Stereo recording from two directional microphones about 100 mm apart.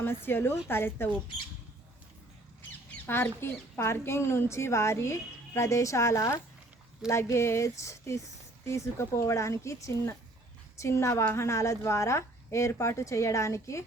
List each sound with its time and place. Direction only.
0.0 s a woman's voice: 20° left (ahead or behind)
3.1 s a woman's voice: 25° left (ahead or behind)